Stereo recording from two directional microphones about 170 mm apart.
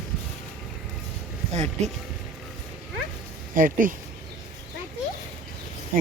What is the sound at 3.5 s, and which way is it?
Speech, 55° right (ahead or behind).